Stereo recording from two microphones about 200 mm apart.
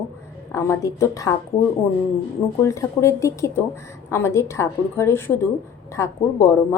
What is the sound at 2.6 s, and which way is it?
A woman's voice, 15° left (ahead or behind).